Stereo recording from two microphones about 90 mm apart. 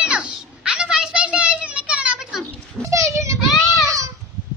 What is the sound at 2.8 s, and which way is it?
Goat, 35° right (ahead or behind).